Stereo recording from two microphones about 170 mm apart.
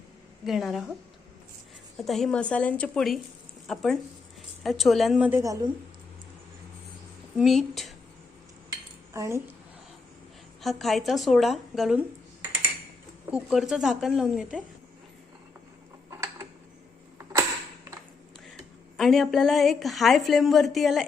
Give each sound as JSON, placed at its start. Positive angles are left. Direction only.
{"t": 0.4, "sound": "a woman's voice", "side_deg": 0}
{"t": 2.0, "sound": "a woman's voice", "side_deg": 0}
{"t": 5.4, "sound": "a woman's voice", "side_deg": -20}
{"t": 7.3, "sound": "a woman's voice", "side_deg": 0}
{"t": 9.1, "sound": "speech", "side_deg": -20}
{"t": 10.6, "sound": "a woman's voice", "side_deg": 0}
{"t": 13.3, "sound": "a woman's voice", "side_deg": -5}
{"t": 16.0, "sound": "mechanisms", "side_deg": -15}
{"t": 18.9, "sound": "a woman's voice", "side_deg": 0}